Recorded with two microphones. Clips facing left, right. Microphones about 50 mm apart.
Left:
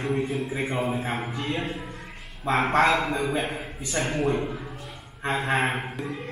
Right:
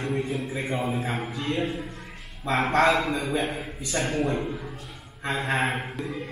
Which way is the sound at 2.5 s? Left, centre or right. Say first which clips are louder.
Even; centre.